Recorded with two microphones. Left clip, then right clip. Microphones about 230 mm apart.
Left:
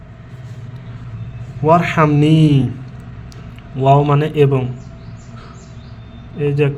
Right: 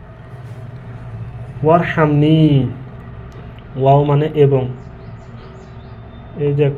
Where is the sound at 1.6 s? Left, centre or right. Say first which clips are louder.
Left 1 dB; left.